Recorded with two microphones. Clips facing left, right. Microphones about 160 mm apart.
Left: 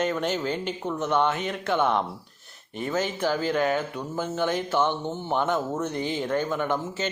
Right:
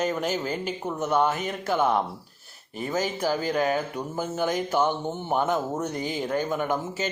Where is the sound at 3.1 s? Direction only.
35° right (ahead or behind).